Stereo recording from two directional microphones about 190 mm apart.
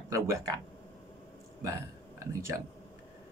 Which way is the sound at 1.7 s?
15° right (ahead or behind).